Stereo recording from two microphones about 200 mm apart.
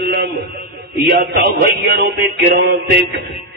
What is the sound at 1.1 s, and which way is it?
Speech, 50° right (ahead or behind).